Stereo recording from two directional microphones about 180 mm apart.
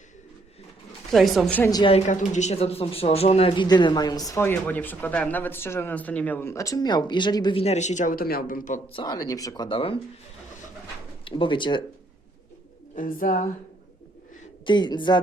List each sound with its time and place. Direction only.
1.1 s speech: centre (ahead or behind)
1.7 s speech: 25° left (ahead or behind)
2.0 s speech: 40° left (ahead or behind); by 7.6 s 25° left (ahead or behind)
7.6 s speech: 40° left (ahead or behind)
8.9 s speech: 25° left (ahead or behind)
11.3 s speech: 30° left (ahead or behind)
13.0 s speech: 50° left (ahead or behind)
14.6 s speech: 25° left (ahead or behind)